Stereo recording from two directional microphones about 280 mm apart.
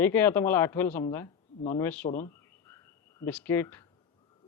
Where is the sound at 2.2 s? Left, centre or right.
Centre.